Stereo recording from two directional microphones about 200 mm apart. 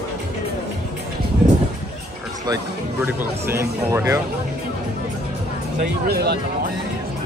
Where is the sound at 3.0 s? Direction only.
10° right (ahead or behind).